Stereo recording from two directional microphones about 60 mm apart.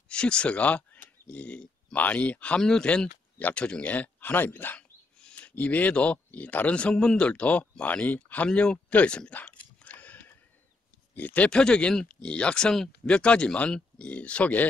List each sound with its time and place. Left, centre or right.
0.1 s speech: centre
5.2 s a sound: centre
5.5 s speech: left
8.5 s speech: centre
8.9 s a sound: centre
11.1 s speech: left